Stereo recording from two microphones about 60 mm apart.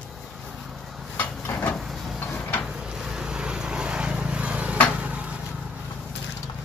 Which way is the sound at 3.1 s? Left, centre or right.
Centre.